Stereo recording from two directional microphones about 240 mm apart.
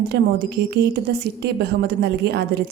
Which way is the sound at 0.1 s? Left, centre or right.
Right.